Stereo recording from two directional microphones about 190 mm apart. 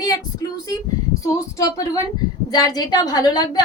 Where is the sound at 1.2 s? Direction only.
20° left (ahead or behind).